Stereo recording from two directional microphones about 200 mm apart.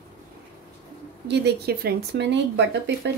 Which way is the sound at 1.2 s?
60° right (ahead or behind).